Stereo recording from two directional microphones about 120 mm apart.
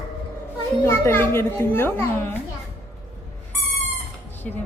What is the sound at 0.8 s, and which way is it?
A child's voice, 20° left (ahead or behind).